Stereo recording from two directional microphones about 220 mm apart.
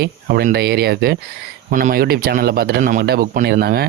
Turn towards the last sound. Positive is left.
turn(degrees=-45)  # may be behind; listen again after turning